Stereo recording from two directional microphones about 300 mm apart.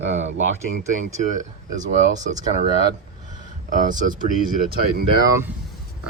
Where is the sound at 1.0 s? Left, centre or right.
Right.